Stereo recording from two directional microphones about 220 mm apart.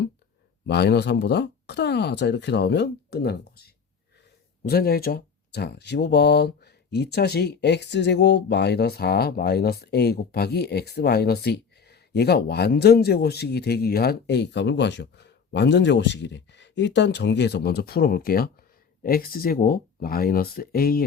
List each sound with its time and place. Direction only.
0.7 s speech: 50° left (ahead or behind)
4.6 s speech: 45° left (ahead or behind)